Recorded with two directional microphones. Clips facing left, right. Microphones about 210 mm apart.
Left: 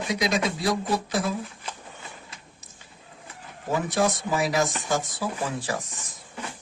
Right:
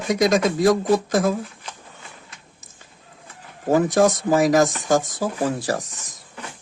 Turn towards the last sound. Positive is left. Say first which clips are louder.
# right 5 dB
turn(degrees=-40)  # may be behind; listen again after turning